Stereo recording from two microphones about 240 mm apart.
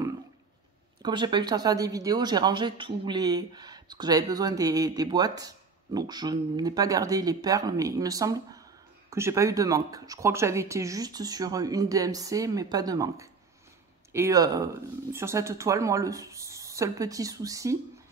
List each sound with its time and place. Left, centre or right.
1.0 s speech: centre